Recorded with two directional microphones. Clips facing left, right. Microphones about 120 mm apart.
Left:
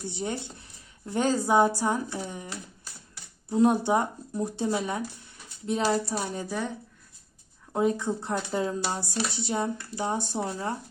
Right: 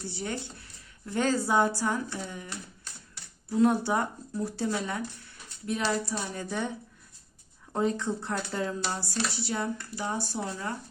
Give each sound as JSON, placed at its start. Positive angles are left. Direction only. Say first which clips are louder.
{"t": 0.1, "sound": "speech", "louder": "left 3 dB", "side_deg": 20}
{"t": 5.8, "sound": "speech", "louder": "left 4 dB", "side_deg": 35}
{"t": 6.4, "sound": "speech", "louder": "left 1 dB", "side_deg": 5}